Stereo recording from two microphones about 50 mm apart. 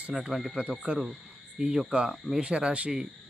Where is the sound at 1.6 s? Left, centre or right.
Centre.